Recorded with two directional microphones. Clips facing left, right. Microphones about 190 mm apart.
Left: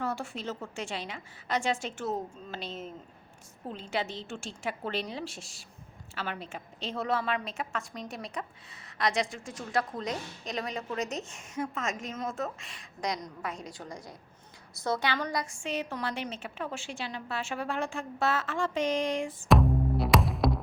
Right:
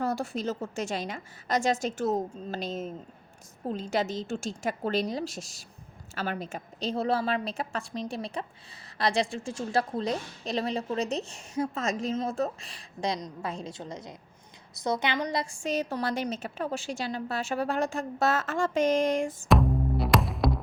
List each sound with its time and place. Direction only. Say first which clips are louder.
0.0 s a woman's voice: right 5 dB; 40° right (ahead or behind)
15.6 s a woman's voice: right 4 dB; 40° right (ahead or behind)
19.5 s music: left 1 dB; centre (ahead or behind)